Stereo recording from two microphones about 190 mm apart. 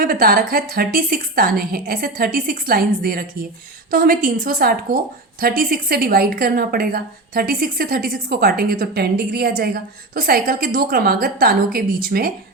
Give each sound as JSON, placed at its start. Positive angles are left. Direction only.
{"t": 0.0, "sound": "a woman's voice", "side_deg": -50}